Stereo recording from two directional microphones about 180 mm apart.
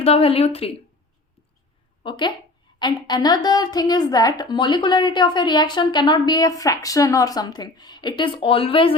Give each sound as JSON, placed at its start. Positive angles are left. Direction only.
{"t": 0.0, "sound": "a woman's voice", "side_deg": 35}
{"t": 2.0, "sound": "a woman's voice", "side_deg": 25}